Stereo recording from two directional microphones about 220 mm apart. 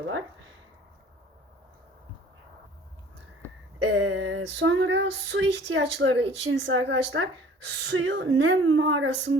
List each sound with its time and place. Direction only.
3.8 s female singing: 80° right